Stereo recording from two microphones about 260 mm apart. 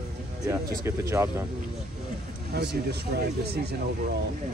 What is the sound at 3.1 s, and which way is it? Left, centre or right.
Speech, right.